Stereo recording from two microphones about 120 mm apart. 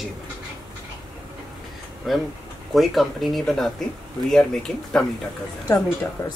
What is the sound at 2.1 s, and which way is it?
Speech, centre (ahead or behind).